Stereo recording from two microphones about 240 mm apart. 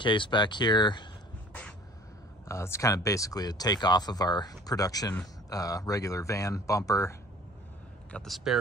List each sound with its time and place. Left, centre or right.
0.0 s speech: centre
1.5 s crow: centre
2.4 s speech: centre
8.1 s speech: centre